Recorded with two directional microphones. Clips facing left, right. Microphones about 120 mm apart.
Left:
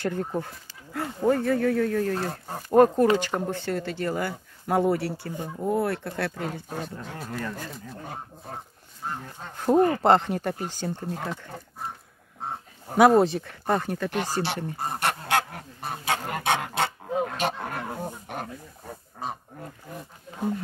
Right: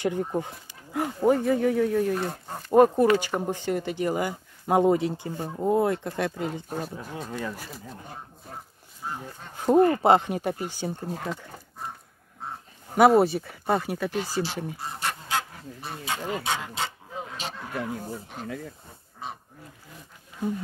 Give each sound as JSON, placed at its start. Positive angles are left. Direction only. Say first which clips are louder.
{"t": 0.0, "sound": "speech", "louder": "right 2 dB", "side_deg": -10}
{"t": 2.1, "sound": "speech", "louder": "even", "side_deg": 0}
{"t": 6.8, "sound": "speech", "louder": "right 1 dB", "side_deg": -5}
{"t": 8.5, "sound": "speech", "louder": "left 3 dB", "side_deg": 55}
{"t": 9.2, "sound": "speech", "louder": "right 2 dB", "side_deg": -5}
{"t": 12.9, "sound": "speech", "louder": "even", "side_deg": -5}
{"t": 14.1, "sound": "speech", "louder": "left 1 dB", "side_deg": 65}
{"t": 14.8, "sound": "goose", "louder": "left 5 dB", "side_deg": 55}
{"t": 15.8, "sound": "speech", "louder": "left 3 dB", "side_deg": 60}
{"t": 19.2, "sound": "speech", "louder": "left 4 dB", "side_deg": 40}